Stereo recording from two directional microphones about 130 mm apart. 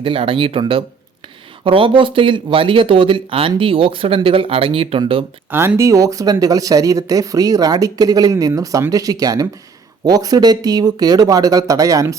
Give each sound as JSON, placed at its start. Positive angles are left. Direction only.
{"t": 0.0, "sound": "speech", "side_deg": -45}
{"t": 5.5, "sound": "speech", "side_deg": -20}